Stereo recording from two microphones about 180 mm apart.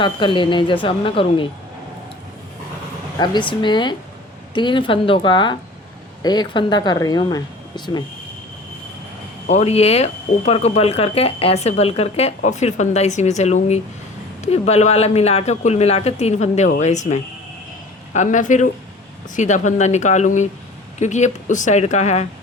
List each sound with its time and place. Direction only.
0.0 s speech: 25° left (ahead or behind)
3.2 s speech: 25° left (ahead or behind)
9.5 s speech: 35° left (ahead or behind)